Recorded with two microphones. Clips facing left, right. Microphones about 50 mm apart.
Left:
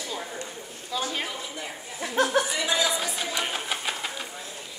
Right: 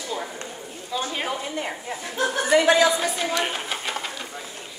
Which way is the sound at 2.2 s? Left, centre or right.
Left.